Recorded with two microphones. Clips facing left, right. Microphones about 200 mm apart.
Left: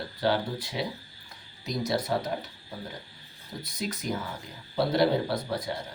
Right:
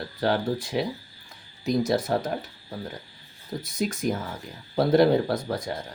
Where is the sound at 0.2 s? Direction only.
45° right (ahead or behind).